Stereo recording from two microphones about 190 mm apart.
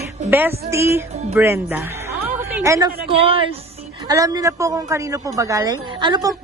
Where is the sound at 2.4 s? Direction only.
15° right (ahead or behind).